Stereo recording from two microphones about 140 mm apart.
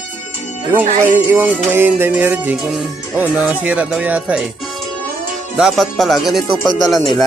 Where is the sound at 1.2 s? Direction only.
15° right (ahead or behind).